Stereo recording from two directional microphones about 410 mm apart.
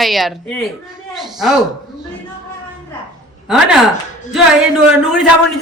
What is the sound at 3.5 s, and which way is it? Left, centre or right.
Speech, centre.